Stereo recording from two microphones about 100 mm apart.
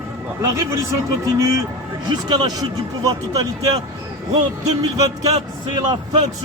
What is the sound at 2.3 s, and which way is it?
A man's voice, 40° right (ahead or behind).